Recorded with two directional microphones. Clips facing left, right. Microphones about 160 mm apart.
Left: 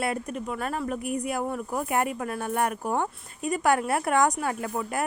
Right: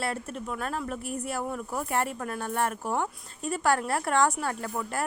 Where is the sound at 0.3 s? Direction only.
Centre (ahead or behind).